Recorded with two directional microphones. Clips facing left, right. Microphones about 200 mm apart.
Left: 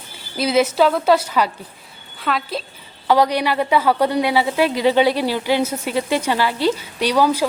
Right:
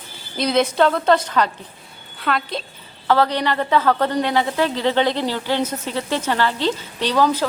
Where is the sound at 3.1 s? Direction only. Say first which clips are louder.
Left 2 dB; 15° left (ahead or behind).